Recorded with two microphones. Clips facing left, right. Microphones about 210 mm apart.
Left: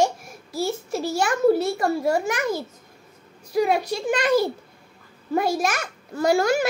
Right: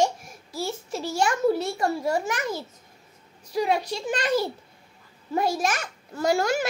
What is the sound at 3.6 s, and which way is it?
Speech, 10° left (ahead or behind).